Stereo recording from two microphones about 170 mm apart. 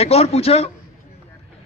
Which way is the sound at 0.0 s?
35° left (ahead or behind).